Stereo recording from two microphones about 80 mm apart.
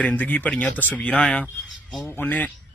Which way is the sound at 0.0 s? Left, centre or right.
Centre.